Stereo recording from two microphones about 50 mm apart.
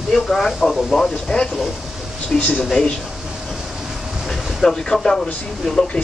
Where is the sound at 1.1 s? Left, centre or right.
Centre.